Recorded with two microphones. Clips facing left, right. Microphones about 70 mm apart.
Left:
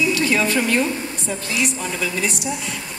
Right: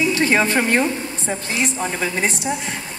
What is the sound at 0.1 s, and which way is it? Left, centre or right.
Speech, right.